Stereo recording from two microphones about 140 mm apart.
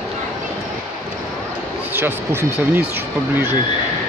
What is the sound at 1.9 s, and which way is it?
Speech, 15° right (ahead or behind).